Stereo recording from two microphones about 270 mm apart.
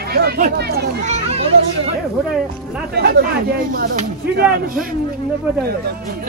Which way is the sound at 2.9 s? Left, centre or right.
Right.